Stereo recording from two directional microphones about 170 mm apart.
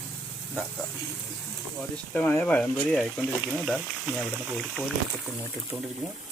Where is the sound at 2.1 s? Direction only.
10° left (ahead or behind).